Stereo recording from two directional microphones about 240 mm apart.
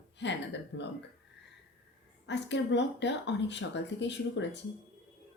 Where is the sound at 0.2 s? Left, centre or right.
Left.